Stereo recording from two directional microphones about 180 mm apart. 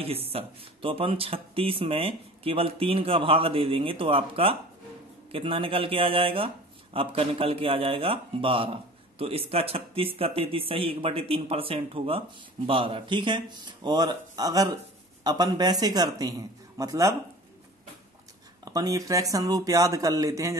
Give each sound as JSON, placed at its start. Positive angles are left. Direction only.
{"t": 0.0, "sound": "speech", "side_deg": -35}
{"t": 18.6, "sound": "speech", "side_deg": -20}